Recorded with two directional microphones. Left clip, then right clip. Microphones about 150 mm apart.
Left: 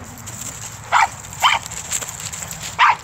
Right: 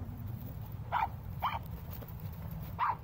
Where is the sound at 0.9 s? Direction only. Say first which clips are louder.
Left 18 dB; 40° left (ahead or behind).